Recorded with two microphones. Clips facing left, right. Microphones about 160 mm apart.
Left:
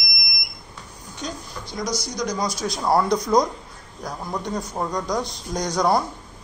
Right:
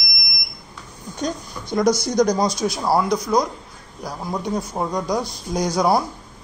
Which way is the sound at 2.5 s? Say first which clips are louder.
Right 1 dB; 10° right (ahead or behind).